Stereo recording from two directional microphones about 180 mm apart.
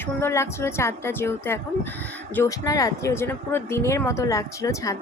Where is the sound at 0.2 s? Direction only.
15° left (ahead or behind).